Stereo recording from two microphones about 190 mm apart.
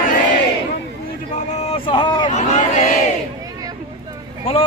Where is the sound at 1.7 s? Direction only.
25° left (ahead or behind).